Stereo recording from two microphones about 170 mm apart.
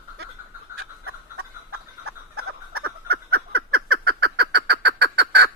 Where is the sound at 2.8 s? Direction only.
70° right (ahead or behind).